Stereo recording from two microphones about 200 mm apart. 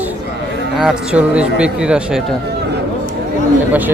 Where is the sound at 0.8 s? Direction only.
5° right (ahead or behind).